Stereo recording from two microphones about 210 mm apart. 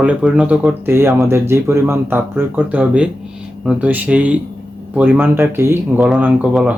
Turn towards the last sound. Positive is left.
turn(degrees=-5)  # may be behind; listen again after turning